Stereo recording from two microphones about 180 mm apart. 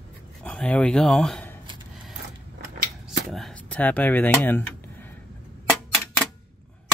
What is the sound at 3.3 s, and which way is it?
Speech, 5° left (ahead or behind).